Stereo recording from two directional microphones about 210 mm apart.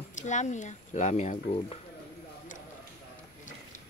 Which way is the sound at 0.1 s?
35° left (ahead or behind).